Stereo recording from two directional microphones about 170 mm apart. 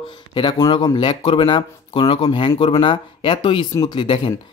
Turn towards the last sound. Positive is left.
turn(degrees=30)  # may be behind; listen again after turning